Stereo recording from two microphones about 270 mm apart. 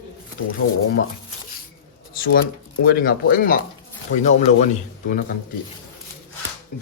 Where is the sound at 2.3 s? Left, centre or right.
Left.